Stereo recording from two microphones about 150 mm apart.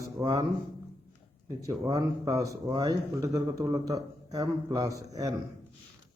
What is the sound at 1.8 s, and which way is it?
A man's voice, 25° right (ahead or behind).